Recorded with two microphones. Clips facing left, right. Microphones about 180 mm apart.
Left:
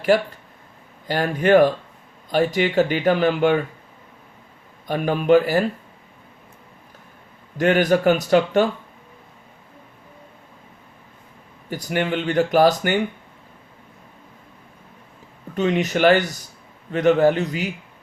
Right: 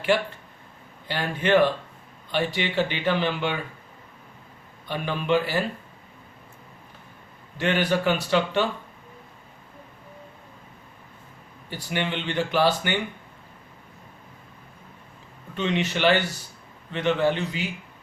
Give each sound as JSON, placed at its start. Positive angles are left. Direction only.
{"t": 0.1, "sound": "speech", "side_deg": 40}
{"t": 4.9, "sound": "speech", "side_deg": 45}
{"t": 7.6, "sound": "speech", "side_deg": 45}
{"t": 11.7, "sound": "speech", "side_deg": 45}
{"t": 15.5, "sound": "speech", "side_deg": 45}